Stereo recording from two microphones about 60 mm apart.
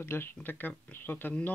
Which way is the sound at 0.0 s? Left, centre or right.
Left.